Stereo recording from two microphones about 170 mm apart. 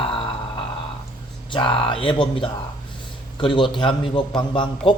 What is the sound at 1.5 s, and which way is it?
Speech, 30° left (ahead or behind).